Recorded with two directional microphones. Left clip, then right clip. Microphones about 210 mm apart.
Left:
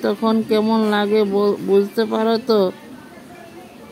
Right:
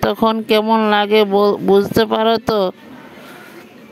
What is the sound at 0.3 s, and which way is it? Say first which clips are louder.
Speech: right 2 dB; 45° right (ahead or behind).